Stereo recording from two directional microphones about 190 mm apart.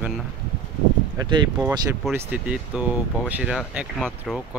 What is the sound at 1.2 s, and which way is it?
Speech, 20° right (ahead or behind).